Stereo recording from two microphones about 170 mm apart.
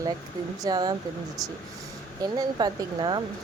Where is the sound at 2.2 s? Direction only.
25° right (ahead or behind).